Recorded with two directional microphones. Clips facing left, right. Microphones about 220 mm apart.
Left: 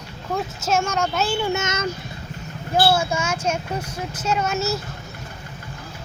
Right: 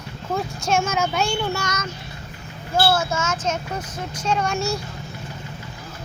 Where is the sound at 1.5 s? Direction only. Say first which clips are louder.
Left 3 dB; 25° left (ahead or behind).